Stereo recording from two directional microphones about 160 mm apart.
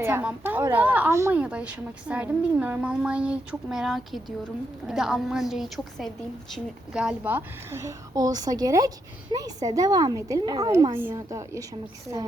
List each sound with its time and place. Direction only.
0.0 s a woman's voice: 10° right (ahead or behind)